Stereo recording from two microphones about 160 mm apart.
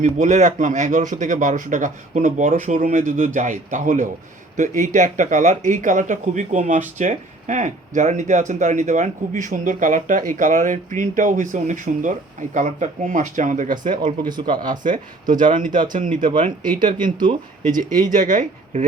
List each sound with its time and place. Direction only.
0.0 s speech: 50° right (ahead or behind)
14.0 s speech: 25° right (ahead or behind)
14.7 s speech: 55° right (ahead or behind)
17.7 s speech: 55° right (ahead or behind)